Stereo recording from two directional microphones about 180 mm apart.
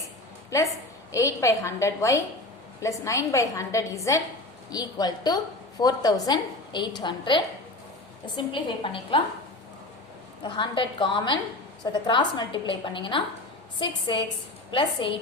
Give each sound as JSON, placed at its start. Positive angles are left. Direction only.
{"t": 0.5, "sound": "a woman's voice", "side_deg": 15}
{"t": 10.4, "sound": "a woman's voice", "side_deg": 25}